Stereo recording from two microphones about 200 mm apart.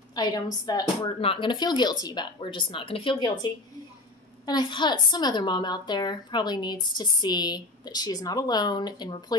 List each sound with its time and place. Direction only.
0.1 s a woman's voice: 20° left (ahead or behind)
4.5 s a woman's voice: 20° left (ahead or behind)